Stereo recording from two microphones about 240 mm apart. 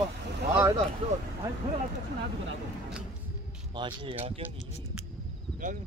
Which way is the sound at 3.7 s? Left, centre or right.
Centre.